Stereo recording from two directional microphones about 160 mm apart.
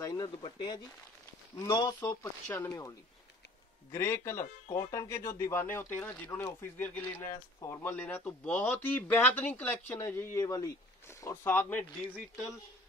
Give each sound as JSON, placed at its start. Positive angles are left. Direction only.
{"t": 0.0, "sound": "a sound", "side_deg": 25}
{"t": 0.4, "sound": "speech", "side_deg": 30}
{"t": 2.0, "sound": "speech", "side_deg": 15}
{"t": 3.9, "sound": "speech", "side_deg": 15}